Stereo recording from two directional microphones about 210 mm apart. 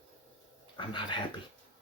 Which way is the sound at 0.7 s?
25° left (ahead or behind).